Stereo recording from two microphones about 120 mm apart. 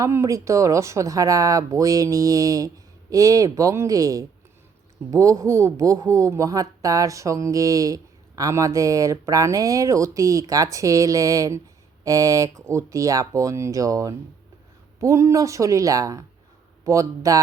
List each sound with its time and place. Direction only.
0.0 s speech: 25° right (ahead or behind)